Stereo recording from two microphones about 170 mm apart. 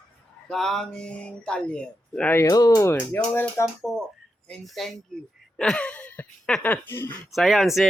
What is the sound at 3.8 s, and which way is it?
Speech, centre (ahead or behind).